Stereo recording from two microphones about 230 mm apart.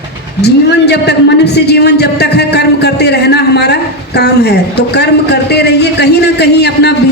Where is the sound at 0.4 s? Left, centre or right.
Left.